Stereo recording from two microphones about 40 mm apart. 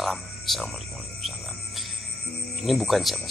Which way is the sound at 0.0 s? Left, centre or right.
Centre.